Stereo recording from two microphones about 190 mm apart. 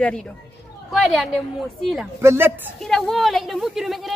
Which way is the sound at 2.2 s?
10° right (ahead or behind).